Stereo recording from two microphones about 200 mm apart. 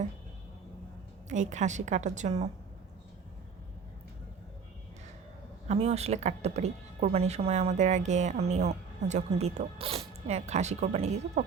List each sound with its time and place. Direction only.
1.3 s a woman's voice: 35° right (ahead or behind)
5.6 s a woman's voice: 30° right (ahead or behind)